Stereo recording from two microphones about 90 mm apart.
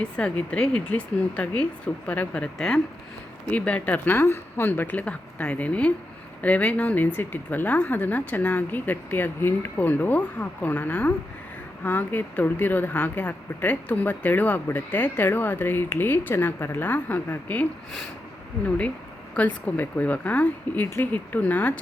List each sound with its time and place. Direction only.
0.0 s speech: 10° left (ahead or behind)
19.3 s speech: 15° left (ahead or behind)